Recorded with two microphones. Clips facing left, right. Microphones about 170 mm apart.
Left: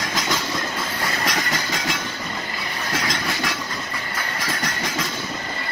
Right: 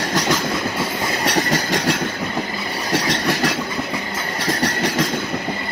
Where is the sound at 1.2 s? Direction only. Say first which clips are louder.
Right 8 dB; 35° right (ahead or behind).